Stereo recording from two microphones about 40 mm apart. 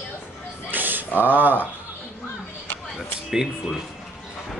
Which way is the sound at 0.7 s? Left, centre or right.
Right.